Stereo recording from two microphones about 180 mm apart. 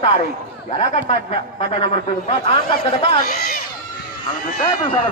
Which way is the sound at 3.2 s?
55° left (ahead or behind).